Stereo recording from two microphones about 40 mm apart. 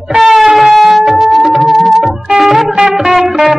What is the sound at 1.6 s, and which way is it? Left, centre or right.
Music, centre.